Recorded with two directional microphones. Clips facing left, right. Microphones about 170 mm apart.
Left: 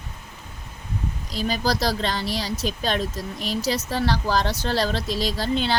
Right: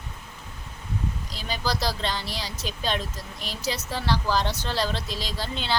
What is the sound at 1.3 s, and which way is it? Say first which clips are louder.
Speech: left 7 dB; 45° left (ahead or behind).